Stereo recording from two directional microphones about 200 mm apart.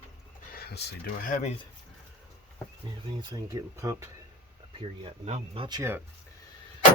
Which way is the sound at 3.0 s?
20° right (ahead or behind).